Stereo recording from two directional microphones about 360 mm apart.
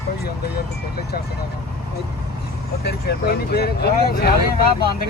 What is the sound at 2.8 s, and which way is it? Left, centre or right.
Speech, left.